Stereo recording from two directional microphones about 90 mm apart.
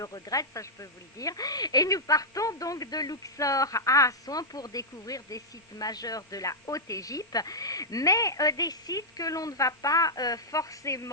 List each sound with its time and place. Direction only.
0.0 s speech: 40° left (ahead or behind)